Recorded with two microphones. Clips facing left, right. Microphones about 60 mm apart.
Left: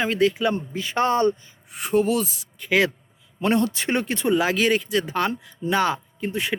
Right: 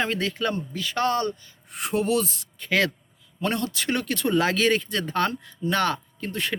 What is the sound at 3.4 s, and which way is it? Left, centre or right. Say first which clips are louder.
Speech: left 5 dB; left.